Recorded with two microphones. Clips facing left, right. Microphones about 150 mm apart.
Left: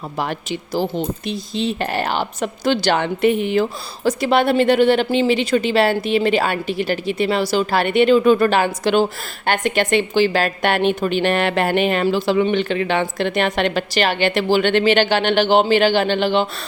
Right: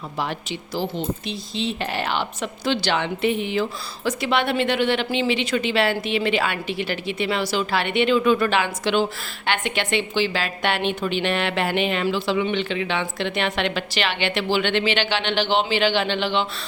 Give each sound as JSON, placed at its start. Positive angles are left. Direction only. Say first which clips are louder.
{"t": 0.2, "sound": "a woman's voice", "louder": "left 4 dB", "side_deg": 50}